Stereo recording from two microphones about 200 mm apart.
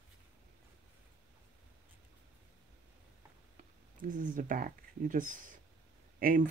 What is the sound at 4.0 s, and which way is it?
Speech, 40° right (ahead or behind).